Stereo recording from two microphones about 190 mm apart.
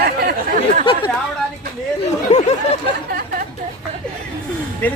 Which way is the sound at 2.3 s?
35° left (ahead or behind).